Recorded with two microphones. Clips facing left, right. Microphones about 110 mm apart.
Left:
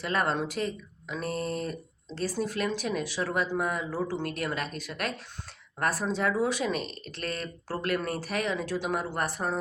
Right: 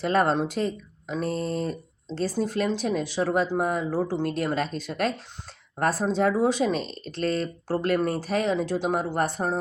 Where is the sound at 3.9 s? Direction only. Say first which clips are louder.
Right 5 dB; 50° right (ahead or behind).